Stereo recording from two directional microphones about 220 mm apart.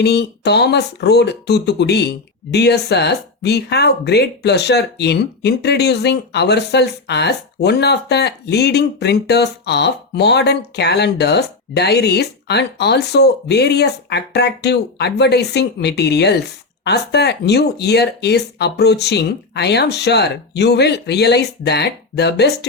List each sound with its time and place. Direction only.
0.0 s speech: 50° left (ahead or behind)